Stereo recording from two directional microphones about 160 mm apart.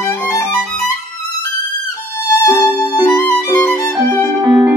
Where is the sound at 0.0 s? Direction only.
20° left (ahead or behind).